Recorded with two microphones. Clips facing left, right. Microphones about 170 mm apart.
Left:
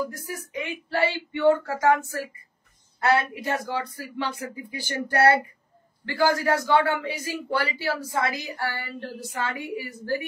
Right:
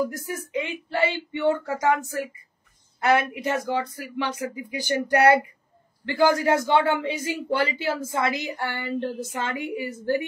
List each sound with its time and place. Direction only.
0.0 s a man's voice: 20° right (ahead or behind)